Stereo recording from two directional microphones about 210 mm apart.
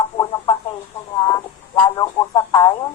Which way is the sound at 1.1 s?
20° left (ahead or behind).